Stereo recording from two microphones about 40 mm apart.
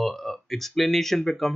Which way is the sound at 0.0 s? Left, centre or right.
Centre.